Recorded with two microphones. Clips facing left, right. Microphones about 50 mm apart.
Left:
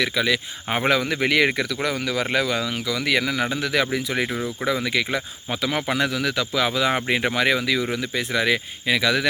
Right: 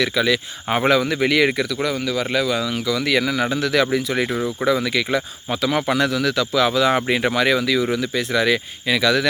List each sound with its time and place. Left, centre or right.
0.0 s speech: centre
2.0 s speech: left
2.6 s speech: centre